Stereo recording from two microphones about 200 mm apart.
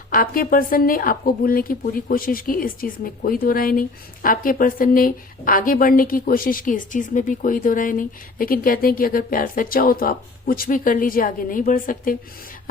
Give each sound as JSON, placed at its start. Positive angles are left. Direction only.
{"t": 0.1, "sound": "a woman's voice", "side_deg": 45}